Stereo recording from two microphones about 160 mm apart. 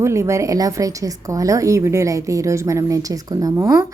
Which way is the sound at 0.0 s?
20° right (ahead or behind).